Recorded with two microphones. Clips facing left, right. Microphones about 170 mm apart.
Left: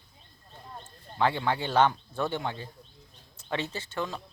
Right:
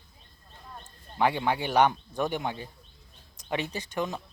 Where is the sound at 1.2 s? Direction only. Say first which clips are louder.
Right 1 dB; 15° right (ahead or behind).